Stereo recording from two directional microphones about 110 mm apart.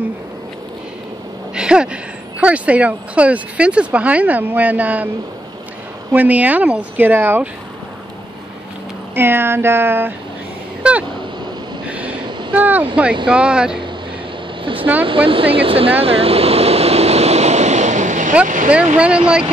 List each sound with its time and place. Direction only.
1.5 s a sound: 10° right (ahead or behind)
2.4 s speech: 10° right (ahead or behind)
6.1 s speech: 15° right (ahead or behind)
9.1 s a sound: 20° right (ahead or behind)
12.5 s speech: 15° right (ahead or behind)
14.6 s vehicle: 50° right (ahead or behind)
15.0 s speech: 55° right (ahead or behind)
16.0 s vehicle: 60° right (ahead or behind); by 18.2 s 90° right
18.3 s speech: 10° right (ahead or behind)